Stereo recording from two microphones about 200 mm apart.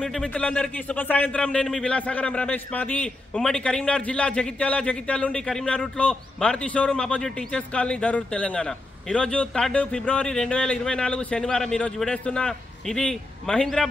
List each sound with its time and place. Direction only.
0.0 s speech: 5° left (ahead or behind)